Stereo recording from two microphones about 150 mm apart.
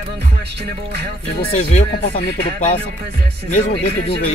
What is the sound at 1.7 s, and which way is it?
Speech, 50° left (ahead or behind).